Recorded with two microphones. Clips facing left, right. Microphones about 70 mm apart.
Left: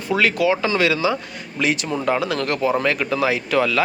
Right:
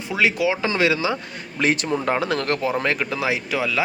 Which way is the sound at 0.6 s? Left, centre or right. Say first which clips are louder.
Left 2 dB; right.